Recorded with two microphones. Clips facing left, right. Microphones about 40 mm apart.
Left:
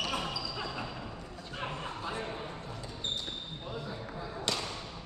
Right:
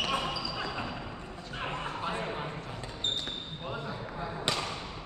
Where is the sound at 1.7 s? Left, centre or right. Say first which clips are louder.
Right 6 dB; right.